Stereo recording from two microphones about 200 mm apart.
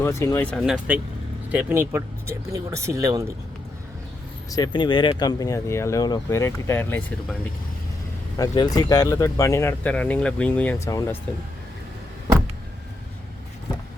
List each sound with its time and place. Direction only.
0.0 s speech: 15° left (ahead or behind)
0.6 s speech: 5° right (ahead or behind)
4.5 s speech: 20° left (ahead or behind)
8.4 s speech: 20° left (ahead or behind)